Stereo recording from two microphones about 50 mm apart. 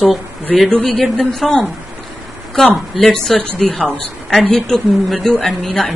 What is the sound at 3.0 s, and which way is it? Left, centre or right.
A woman's voice, centre.